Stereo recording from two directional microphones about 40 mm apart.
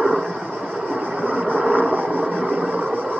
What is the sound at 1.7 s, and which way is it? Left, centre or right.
Vehicle, left.